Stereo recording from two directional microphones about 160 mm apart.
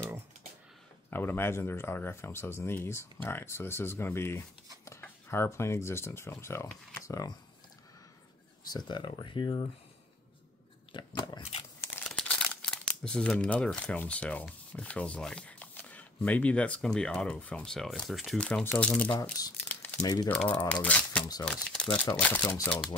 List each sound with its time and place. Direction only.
1.1 s speech: 15° left (ahead or behind)
8.7 s speech: 30° left (ahead or behind)
10.9 s biting: 30° left (ahead or behind)
12.0 s speech: 5° left (ahead or behind)
19.4 s speech: 25° left (ahead or behind)
19.7 s crumpling: 10° left (ahead or behind)
20.2 s speech: 10° left (ahead or behind)
21.2 s speech: 25° left (ahead or behind)
21.5 s speech: 5° left (ahead or behind)